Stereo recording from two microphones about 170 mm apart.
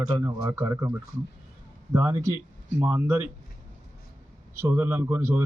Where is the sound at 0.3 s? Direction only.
20° right (ahead or behind).